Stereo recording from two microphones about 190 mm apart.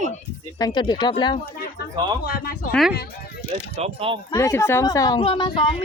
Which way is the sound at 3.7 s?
30° right (ahead or behind).